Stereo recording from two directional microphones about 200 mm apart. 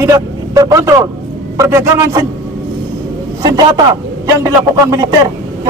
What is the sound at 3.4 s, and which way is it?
A man's voice, 20° right (ahead or behind).